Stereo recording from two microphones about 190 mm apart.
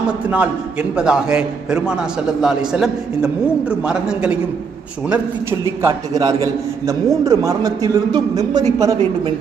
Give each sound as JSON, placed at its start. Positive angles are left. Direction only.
{"t": 0.3, "sound": "a man's voice", "side_deg": -5}
{"t": 5.8, "sound": "a man's voice", "side_deg": -20}